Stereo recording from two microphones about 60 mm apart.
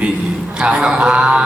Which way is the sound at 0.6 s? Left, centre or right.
Centre.